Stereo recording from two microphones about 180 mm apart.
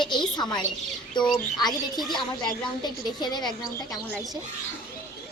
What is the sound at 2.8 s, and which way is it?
Speech, 25° left (ahead or behind).